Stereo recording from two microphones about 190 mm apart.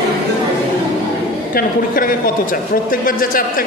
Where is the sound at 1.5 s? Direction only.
50° left (ahead or behind).